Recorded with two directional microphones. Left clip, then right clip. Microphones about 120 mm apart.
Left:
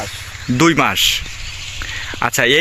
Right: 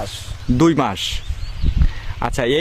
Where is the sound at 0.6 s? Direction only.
30° right (ahead or behind).